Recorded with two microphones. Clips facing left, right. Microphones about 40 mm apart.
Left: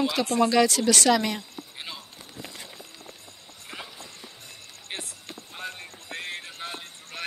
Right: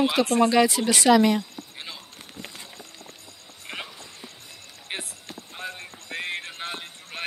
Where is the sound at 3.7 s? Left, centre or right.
Right.